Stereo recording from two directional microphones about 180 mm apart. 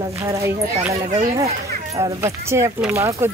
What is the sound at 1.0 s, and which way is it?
Speech, 35° right (ahead or behind).